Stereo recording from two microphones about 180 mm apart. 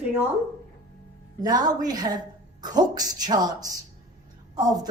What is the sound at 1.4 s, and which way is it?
Speech, 20° right (ahead or behind).